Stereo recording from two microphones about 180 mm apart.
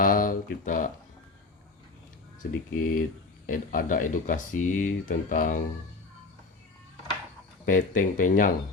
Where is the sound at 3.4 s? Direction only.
50° left (ahead or behind).